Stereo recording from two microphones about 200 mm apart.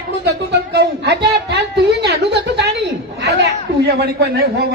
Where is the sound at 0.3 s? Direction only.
55° right (ahead or behind).